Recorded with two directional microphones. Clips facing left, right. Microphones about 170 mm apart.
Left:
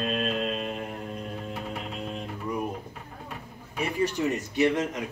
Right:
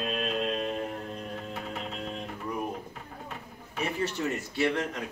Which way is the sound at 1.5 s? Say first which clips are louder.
Left 2 dB; 10° left (ahead or behind).